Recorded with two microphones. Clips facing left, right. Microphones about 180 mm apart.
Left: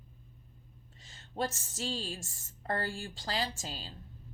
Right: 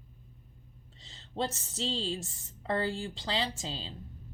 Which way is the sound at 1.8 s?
25° right (ahead or behind).